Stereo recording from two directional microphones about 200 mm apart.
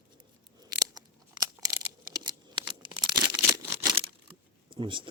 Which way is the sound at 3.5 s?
20° right (ahead or behind).